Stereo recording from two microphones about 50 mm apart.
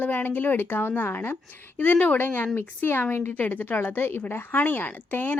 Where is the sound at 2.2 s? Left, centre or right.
Left.